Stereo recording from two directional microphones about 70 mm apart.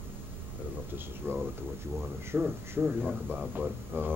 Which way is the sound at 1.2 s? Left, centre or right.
Right.